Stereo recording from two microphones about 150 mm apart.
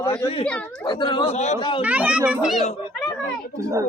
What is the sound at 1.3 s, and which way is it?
Speech, 50° left (ahead or behind).